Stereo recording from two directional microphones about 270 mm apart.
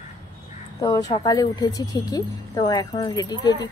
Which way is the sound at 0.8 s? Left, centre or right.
Centre.